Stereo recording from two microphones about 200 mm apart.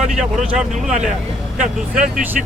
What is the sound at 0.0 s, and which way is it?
Speech, 35° right (ahead or behind).